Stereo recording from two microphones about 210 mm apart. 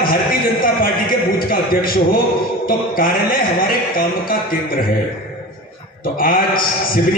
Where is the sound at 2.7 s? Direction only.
45° left (ahead or behind).